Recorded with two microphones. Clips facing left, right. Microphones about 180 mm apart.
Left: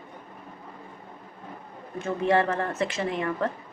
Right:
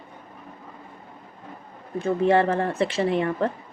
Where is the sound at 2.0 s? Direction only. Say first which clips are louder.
Right 4 dB; 30° right (ahead or behind).